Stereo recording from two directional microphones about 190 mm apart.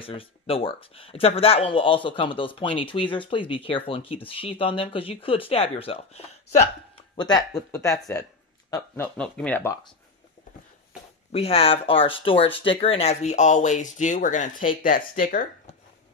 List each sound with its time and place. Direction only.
0.0 s speech: 30° left (ahead or behind)
7.2 s speech: 20° left (ahead or behind)
11.3 s speech: 30° left (ahead or behind); by 15.4 s 45° left (ahead or behind)